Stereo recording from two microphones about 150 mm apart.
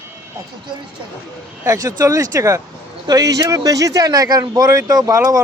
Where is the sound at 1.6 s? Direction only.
25° right (ahead or behind).